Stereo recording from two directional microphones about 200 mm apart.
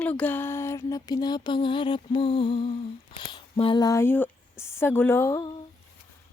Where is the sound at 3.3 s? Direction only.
25° left (ahead or behind).